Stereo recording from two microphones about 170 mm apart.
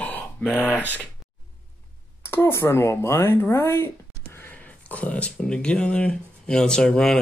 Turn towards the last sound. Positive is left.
turn(degrees=5)  # may be behind; listen again after turning